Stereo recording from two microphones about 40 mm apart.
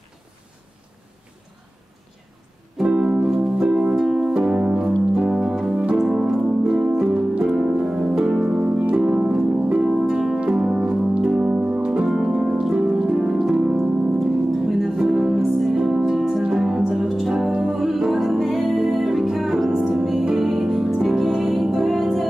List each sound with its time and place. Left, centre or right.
2.8 s music: right
3.3 s harp: centre
3.6 s music: right
3.9 s music: centre
4.4 s music: right
5.9 s keyboard: centre
7.1 s music: right
8.0 s harp: centre
8.5 s harp: right
8.9 s harp: centre
10.4 s music: centre
16.2 s music: centre